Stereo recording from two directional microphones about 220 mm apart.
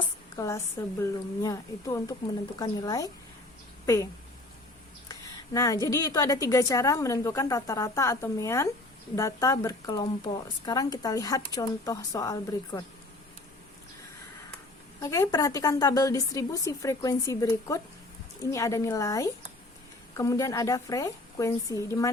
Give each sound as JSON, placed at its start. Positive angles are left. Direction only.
{"t": 0.3, "sound": "a woman's voice", "side_deg": 15}
{"t": 5.5, "sound": "speech", "side_deg": 15}
{"t": 15.0, "sound": "speech", "side_deg": 15}